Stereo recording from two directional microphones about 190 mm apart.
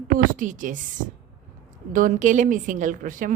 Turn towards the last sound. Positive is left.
turn(degrees=-45)  # may be behind; listen again after turning